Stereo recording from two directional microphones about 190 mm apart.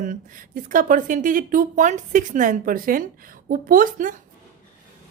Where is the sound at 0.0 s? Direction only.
45° right (ahead or behind).